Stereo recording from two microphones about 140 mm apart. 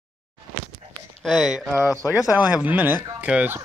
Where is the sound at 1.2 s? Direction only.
Centre (ahead or behind).